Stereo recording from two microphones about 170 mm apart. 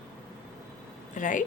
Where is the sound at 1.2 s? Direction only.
50° left (ahead or behind).